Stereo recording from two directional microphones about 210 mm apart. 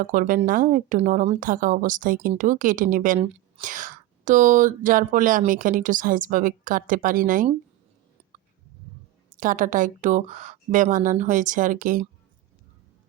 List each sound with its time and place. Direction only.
0.0 s speech: 40° right (ahead or behind)
9.4 s speech: 40° right (ahead or behind)